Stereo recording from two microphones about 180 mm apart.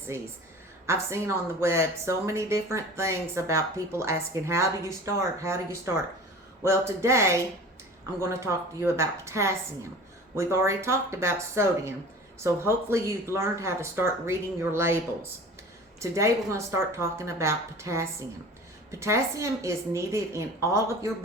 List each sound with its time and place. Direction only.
0.1 s speech: 15° right (ahead or behind)